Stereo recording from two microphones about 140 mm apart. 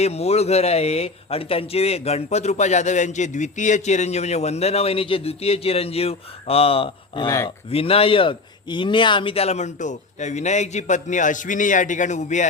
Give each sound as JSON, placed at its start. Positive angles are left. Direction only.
{"t": 0.0, "sound": "speech", "side_deg": 50}
{"t": 7.3, "sound": "speech", "side_deg": 25}
{"t": 7.7, "sound": "a man's voice", "side_deg": 45}